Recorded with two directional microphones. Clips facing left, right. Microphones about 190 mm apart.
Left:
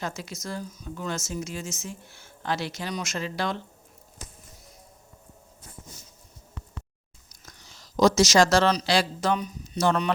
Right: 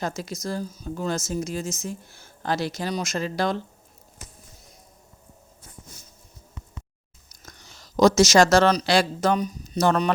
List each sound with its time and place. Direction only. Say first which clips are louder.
0.0 s speech: right 5 dB; 40° right (ahead or behind)
7.4 s speech: right 3 dB; 55° right (ahead or behind)